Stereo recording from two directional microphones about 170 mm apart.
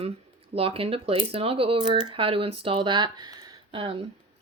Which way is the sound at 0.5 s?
35° right (ahead or behind).